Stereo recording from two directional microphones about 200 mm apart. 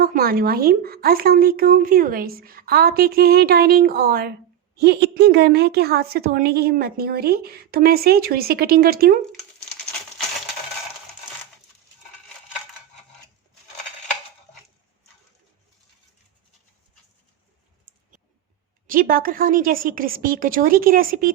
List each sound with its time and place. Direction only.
0.0 s a woman's voice: 50° right (ahead or behind)
18.9 s a woman's voice: 45° right (ahead or behind)